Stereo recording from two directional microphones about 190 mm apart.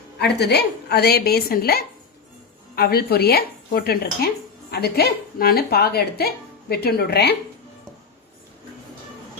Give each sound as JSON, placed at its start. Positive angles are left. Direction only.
{"t": 0.2, "sound": "speech", "side_deg": 60}